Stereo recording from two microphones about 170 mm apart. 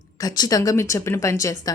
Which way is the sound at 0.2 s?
25° left (ahead or behind).